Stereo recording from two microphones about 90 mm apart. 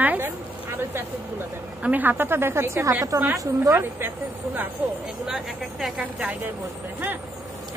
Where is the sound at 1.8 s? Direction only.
20° right (ahead or behind); by 3.2 s 35° right (ahead or behind).